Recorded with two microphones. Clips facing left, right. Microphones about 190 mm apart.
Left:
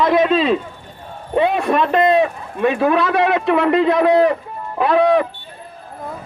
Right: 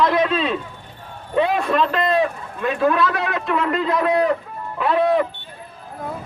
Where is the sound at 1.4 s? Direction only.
65° left (ahead or behind).